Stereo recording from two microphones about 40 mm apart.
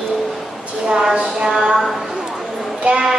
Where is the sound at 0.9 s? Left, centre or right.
Centre.